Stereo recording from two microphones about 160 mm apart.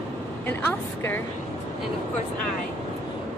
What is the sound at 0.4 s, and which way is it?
Speech, 15° left (ahead or behind).